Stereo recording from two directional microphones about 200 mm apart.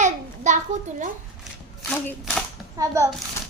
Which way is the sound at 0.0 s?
35° right (ahead or behind).